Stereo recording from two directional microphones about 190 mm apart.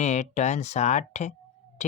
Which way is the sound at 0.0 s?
40° left (ahead or behind).